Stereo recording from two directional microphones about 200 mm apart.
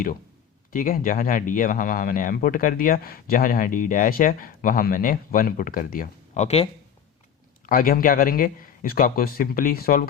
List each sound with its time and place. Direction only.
0.7 s speech: 45° left (ahead or behind)
7.7 s speech: 45° left (ahead or behind)